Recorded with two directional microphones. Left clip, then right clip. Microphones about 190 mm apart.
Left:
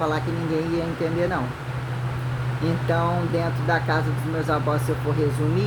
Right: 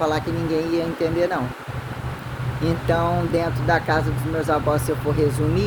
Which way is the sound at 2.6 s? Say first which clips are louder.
Right 3 dB; 40° right (ahead or behind).